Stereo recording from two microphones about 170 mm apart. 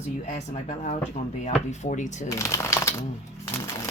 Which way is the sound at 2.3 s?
15° left (ahead or behind).